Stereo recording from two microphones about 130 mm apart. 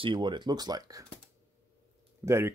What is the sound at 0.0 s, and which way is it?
Speech, 35° right (ahead or behind).